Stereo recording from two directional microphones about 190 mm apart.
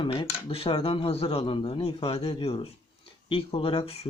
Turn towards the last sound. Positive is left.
turn(degrees=30)  # may be behind; listen again after turning